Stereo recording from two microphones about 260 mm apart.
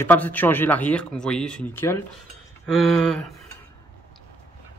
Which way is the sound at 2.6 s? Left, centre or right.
Centre.